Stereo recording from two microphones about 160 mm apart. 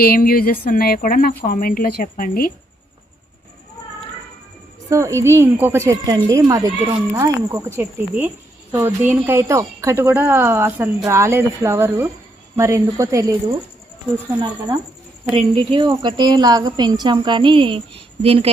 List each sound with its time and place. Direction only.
0.0 s a woman's voice: 65° left (ahead or behind)
4.9 s a woman's voice: 20° right (ahead or behind); by 18.4 s 35° right (ahead or behind)